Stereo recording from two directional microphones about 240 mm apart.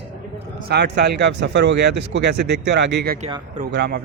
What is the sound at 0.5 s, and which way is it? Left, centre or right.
Speech, right.